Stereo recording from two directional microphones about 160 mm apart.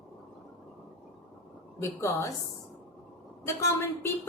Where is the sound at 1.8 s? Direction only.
15° left (ahead or behind).